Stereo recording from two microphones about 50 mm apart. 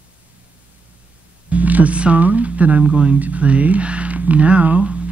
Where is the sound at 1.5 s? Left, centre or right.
Right.